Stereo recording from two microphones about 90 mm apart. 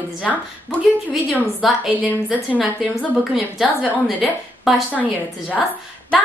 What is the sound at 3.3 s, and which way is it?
A woman's voice, 5° right (ahead or behind).